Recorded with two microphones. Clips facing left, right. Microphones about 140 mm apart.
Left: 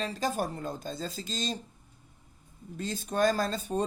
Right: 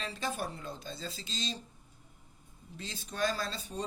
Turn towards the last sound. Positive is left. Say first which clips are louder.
# left 8 dB
turn(degrees=50)  # may be behind; listen again after turning